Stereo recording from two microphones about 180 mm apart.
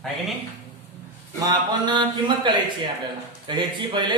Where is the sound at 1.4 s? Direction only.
20° right (ahead or behind).